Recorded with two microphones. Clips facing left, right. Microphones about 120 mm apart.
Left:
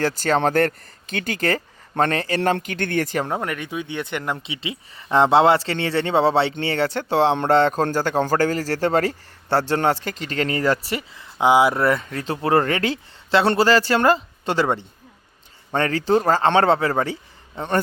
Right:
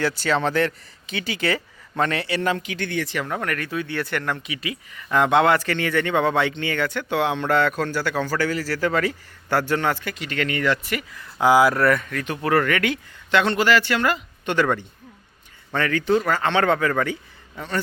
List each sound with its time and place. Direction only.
0.0 s speech: 45° left (ahead or behind)
3.2 s speech: 20° left (ahead or behind)